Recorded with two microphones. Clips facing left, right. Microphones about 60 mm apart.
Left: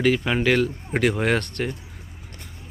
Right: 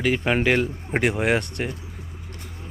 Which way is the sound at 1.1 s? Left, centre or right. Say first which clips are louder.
Even; centre.